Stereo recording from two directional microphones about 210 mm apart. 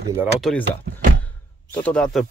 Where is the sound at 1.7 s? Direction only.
5° left (ahead or behind).